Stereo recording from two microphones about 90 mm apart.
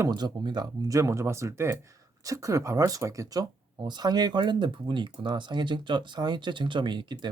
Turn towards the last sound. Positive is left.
turn(degrees=-60)  # may be behind; listen again after turning